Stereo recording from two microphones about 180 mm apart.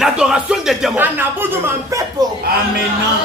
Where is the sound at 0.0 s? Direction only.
5° right (ahead or behind).